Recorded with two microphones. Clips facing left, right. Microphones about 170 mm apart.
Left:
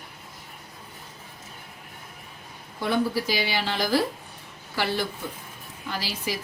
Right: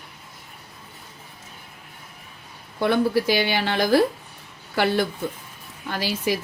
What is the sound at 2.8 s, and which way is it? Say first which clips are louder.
Speech: right 5 dB; 60° right (ahead or behind).